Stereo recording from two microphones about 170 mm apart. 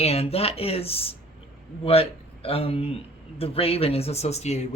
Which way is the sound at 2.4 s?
35° left (ahead or behind).